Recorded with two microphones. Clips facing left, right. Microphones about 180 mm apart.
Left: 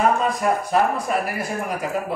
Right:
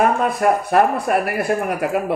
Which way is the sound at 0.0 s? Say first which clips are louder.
Right 3 dB; 60° right (ahead or behind).